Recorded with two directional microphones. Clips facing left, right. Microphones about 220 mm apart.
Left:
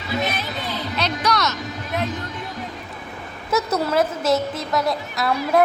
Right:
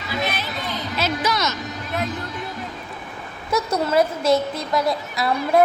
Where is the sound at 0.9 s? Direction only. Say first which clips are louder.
Even; 5° right (ahead or behind).